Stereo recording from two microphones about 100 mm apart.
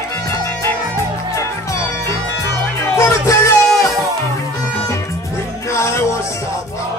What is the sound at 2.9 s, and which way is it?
Music, 30° left (ahead or behind).